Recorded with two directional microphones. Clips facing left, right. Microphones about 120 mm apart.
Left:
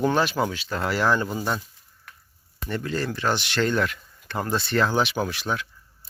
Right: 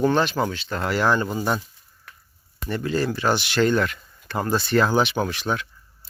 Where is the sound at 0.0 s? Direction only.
5° left (ahead or behind).